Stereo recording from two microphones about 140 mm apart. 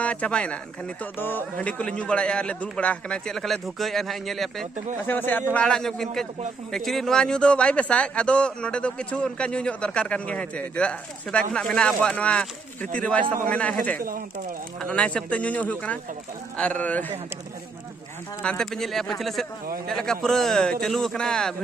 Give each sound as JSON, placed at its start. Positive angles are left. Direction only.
{"t": 0.0, "sound": "a man's voice", "side_deg": 10}
{"t": 5.0, "sound": "a man's voice", "side_deg": 15}
{"t": 13.9, "sound": "speech", "side_deg": -90}
{"t": 14.8, "sound": "a man's voice", "side_deg": 10}
{"t": 18.4, "sound": "speech", "side_deg": 5}